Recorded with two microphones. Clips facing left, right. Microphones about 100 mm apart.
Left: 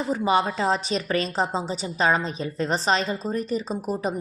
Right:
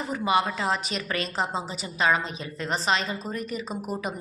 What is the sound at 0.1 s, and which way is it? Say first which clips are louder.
A woman's voice: left 2 dB; 35° left (ahead or behind).